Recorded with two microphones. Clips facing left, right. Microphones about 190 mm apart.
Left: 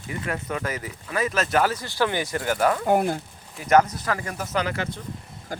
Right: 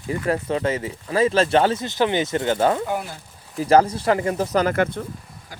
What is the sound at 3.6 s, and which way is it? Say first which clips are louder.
Speech: right 3 dB; 30° right (ahead or behind).